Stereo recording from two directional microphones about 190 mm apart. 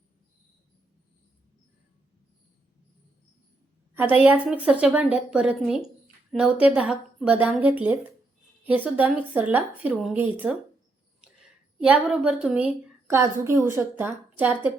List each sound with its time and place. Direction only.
4.1 s a woman's voice: 5° right (ahead or behind)